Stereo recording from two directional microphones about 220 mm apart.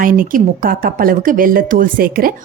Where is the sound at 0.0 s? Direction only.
40° right (ahead or behind).